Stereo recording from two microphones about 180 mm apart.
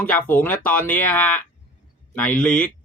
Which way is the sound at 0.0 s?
10° left (ahead or behind).